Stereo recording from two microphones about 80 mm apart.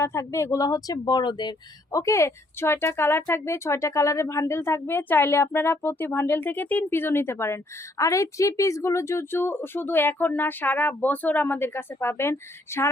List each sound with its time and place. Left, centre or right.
0.0 s speech: left
1.9 s speech: left